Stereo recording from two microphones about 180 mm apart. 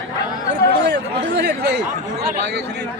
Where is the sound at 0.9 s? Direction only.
70° right (ahead or behind).